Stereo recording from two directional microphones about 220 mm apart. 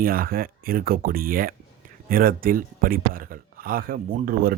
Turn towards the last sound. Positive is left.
turn(degrees=-35)  # may be behind; listen again after turning